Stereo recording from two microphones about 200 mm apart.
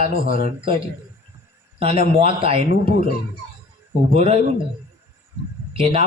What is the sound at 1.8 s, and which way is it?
A man's voice, 30° right (ahead or behind).